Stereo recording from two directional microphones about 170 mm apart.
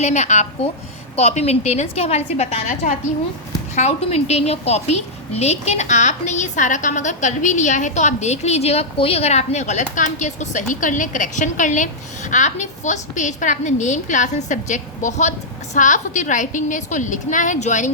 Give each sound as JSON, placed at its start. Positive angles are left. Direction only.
{"t": 0.0, "sound": "a woman's voice", "side_deg": 45}